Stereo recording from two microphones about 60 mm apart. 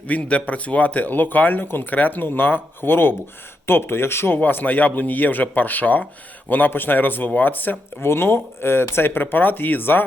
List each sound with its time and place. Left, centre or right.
0.1 s speech: left
4.4 s speech: left
8.0 s speech: left